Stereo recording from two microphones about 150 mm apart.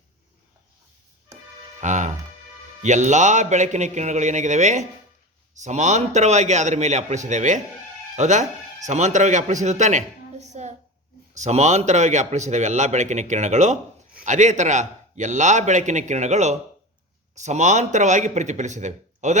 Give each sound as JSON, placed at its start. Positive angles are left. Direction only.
{"t": 1.8, "sound": "a woman's voice", "side_deg": -55}